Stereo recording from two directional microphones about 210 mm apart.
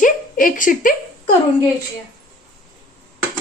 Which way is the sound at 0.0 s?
40° left (ahead or behind).